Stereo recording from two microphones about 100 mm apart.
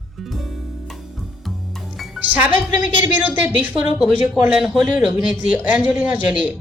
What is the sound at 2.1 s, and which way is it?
A woman's voice, 15° right (ahead or behind).